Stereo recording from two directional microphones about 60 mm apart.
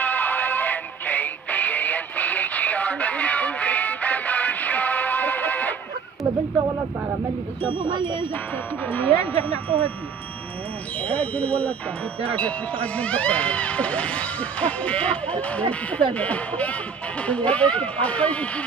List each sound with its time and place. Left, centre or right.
0.0 s music: left
8.8 s speech: left
11.0 s speech: left